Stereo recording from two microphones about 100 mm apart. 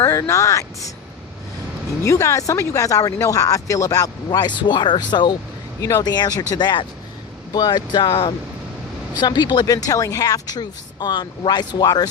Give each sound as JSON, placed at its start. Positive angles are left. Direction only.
{"t": 0.0, "sound": "speech", "side_deg": 30}
{"t": 2.0, "sound": "speech", "side_deg": 30}